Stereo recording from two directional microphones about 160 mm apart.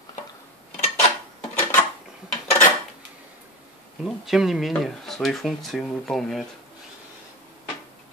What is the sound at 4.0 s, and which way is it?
Speech, centre (ahead or behind).